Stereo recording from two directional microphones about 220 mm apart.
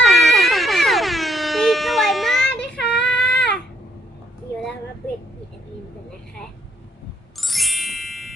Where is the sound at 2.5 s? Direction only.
50° left (ahead or behind).